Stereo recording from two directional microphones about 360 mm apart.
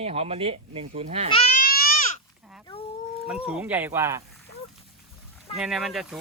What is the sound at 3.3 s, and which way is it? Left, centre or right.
Speech, centre.